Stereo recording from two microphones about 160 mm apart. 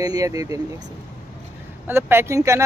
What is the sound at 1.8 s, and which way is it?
Speech, 15° right (ahead or behind).